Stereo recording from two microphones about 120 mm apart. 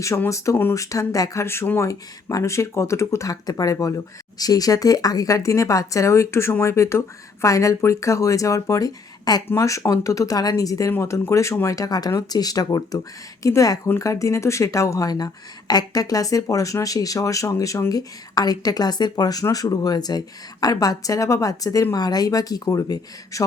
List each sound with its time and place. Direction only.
0.0 s a woman's voice: 25° left (ahead or behind)